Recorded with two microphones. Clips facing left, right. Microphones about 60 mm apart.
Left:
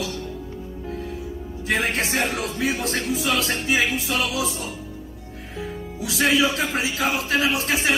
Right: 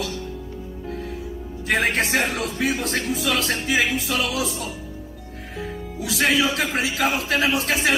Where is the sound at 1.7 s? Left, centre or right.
Right.